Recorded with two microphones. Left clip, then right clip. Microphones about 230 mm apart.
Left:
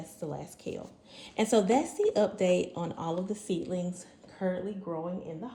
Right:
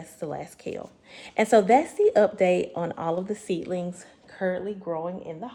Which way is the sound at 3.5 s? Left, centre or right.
Right.